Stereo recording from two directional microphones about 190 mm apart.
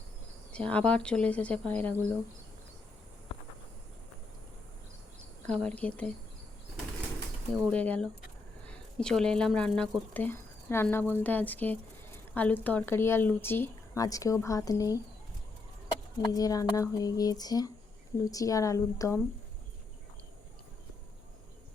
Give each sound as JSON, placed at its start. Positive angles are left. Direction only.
{"t": 0.5, "sound": "speech", "side_deg": 5}
{"t": 5.5, "sound": "speech", "side_deg": 5}
{"t": 7.7, "sound": "speech", "side_deg": 5}
{"t": 16.2, "sound": "speech", "side_deg": 20}